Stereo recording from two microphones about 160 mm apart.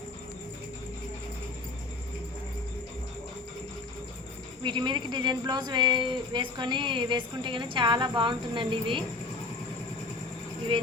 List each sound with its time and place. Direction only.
4.6 s speech: 30° right (ahead or behind)